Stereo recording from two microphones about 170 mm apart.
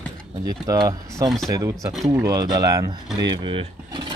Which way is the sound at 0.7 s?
20° right (ahead or behind).